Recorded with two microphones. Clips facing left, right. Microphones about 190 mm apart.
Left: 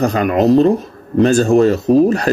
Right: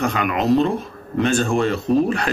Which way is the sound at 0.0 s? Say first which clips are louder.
Left 7 dB; 40° left (ahead or behind).